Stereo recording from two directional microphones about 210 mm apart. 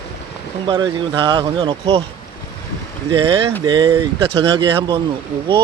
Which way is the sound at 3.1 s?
25° right (ahead or behind).